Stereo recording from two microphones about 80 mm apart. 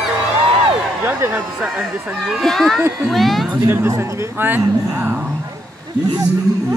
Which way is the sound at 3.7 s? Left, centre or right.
Right.